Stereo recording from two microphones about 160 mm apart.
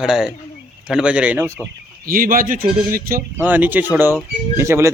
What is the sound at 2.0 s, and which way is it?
Speech, 60° right (ahead or behind).